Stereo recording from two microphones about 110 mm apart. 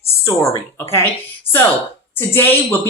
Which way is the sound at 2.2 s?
20° left (ahead or behind).